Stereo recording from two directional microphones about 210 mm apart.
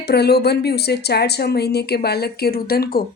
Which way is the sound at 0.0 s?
50° left (ahead or behind).